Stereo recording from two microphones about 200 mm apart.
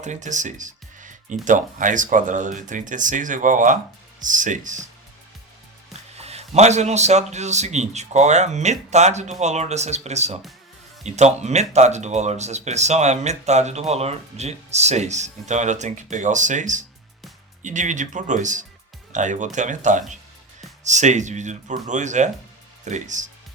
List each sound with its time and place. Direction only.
0.0 s music: 35° right (ahead or behind)
1.5 s speech: 40° right (ahead or behind)
6.1 s speech: 30° right (ahead or behind)